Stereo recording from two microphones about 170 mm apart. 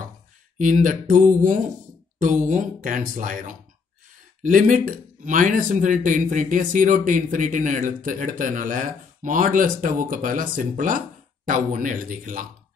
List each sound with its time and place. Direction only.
0.6 s speech: 50° right (ahead or behind)